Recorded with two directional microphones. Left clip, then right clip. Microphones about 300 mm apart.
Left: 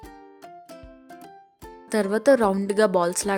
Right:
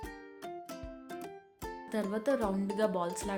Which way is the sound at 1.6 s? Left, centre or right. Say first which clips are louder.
Left 11 dB; left.